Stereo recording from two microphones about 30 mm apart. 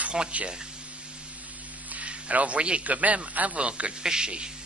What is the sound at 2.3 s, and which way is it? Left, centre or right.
Speech, right.